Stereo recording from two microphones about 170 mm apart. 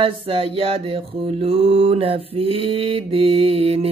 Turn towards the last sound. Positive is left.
turn(degrees=-35)  # may be behind; listen again after turning